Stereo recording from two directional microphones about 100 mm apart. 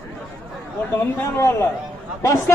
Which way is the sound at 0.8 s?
20° left (ahead or behind).